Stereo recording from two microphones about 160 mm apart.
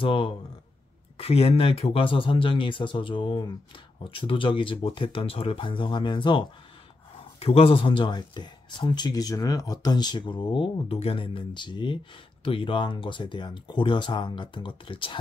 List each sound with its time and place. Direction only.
0.0 s speech: 35° left (ahead or behind)